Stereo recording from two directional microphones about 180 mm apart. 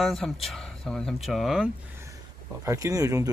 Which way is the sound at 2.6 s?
20° right (ahead or behind).